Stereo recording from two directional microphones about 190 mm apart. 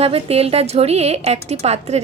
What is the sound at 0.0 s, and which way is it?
A woman's voice, 30° right (ahead or behind).